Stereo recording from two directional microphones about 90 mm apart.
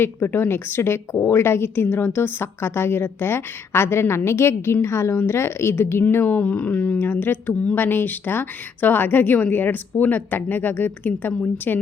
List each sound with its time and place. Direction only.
0.0 s a woman's voice: 25° left (ahead or behind)